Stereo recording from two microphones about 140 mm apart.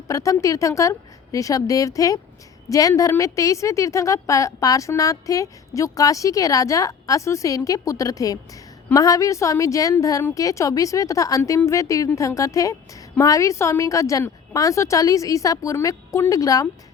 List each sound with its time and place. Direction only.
0.1 s a woman's voice: 25° left (ahead or behind)